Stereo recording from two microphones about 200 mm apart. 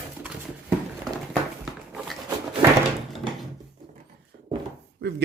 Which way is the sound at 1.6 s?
5° right (ahead or behind).